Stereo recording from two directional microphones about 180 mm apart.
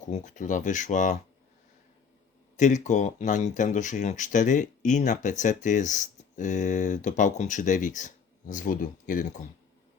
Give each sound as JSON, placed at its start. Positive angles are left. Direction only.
{"t": 0.0, "sound": "speech", "side_deg": 45}
{"t": 2.6, "sound": "speech", "side_deg": 45}